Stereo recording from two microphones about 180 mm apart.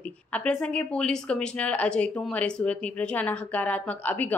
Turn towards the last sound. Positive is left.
turn(degrees=10)  # may be behind; listen again after turning